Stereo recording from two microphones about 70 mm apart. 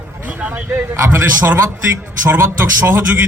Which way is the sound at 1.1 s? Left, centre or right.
Right.